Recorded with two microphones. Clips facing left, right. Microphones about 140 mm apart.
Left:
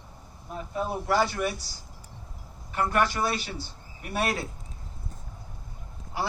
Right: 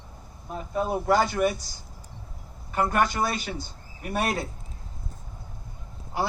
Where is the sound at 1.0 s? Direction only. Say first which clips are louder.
Right 3 dB; 50° right (ahead or behind).